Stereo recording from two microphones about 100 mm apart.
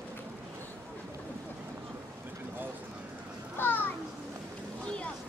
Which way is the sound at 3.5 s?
20° left (ahead or behind).